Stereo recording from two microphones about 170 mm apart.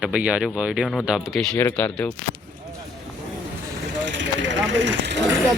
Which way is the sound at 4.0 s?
90° right.